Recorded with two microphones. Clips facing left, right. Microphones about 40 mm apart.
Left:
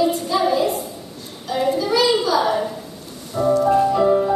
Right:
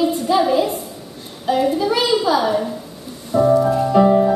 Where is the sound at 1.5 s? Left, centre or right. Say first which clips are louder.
Right 2 dB; right.